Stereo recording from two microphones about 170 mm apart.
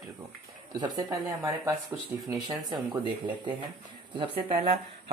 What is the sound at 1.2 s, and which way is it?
Speech, centre (ahead or behind).